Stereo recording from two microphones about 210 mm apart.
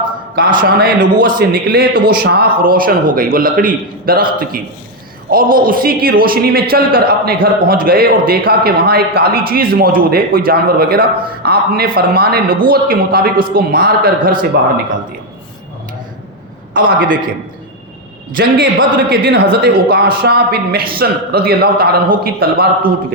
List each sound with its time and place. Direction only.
0.3 s a man's voice: 40° right (ahead or behind)
16.7 s a man's voice: 40° right (ahead or behind)
18.3 s a man's voice: 45° right (ahead or behind)